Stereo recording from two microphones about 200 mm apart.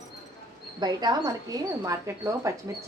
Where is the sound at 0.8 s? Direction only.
20° right (ahead or behind).